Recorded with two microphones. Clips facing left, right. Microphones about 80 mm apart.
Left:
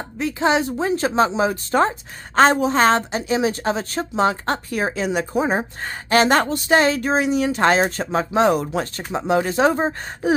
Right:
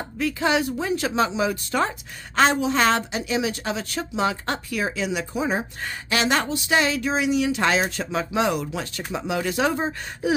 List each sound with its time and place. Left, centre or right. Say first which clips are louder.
0.2 s speech: left 3 dB; left